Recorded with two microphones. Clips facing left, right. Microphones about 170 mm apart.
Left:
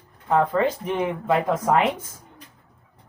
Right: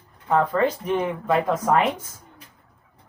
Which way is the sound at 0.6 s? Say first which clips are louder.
Right 1 dB; 25° left (ahead or behind).